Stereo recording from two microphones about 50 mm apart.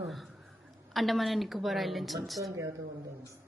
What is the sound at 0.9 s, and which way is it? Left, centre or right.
A woman's voice, centre.